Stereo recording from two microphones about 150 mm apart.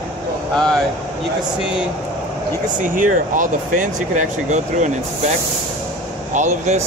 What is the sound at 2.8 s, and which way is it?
Speech, 60° right (ahead or behind).